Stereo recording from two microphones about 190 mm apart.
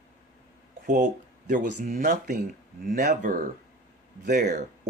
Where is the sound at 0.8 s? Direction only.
40° right (ahead or behind).